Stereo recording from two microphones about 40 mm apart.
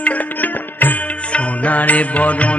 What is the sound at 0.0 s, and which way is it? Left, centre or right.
Music, left.